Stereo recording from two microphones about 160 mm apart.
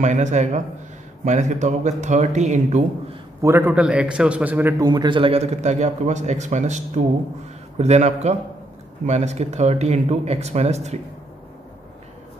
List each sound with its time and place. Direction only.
0.0 s a man's voice: 50° right (ahead or behind)
3.4 s a man's voice: 15° right (ahead or behind)
4.8 s a man's voice: 25° right (ahead or behind); by 11.0 s 45° right (ahead or behind)